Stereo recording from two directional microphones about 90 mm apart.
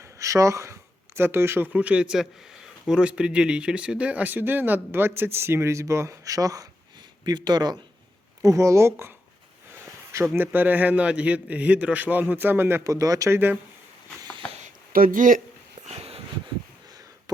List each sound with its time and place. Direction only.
0.0 s speech: 35° right (ahead or behind)
1.7 s speech: 15° right (ahead or behind); by 6.7 s 40° right (ahead or behind)
7.3 s speech: 50° right (ahead or behind)
8.4 s speech: 35° right (ahead or behind)
10.3 s a man's voice: 20° right (ahead or behind)
12.8 s speech: 40° right (ahead or behind)
13.3 s speech: 20° right (ahead or behind)
16.0 s dog: 90° right
17.3 s cough: 45° right (ahead or behind)